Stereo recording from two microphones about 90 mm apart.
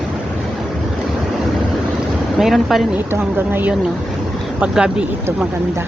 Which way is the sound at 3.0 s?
25° right (ahead or behind).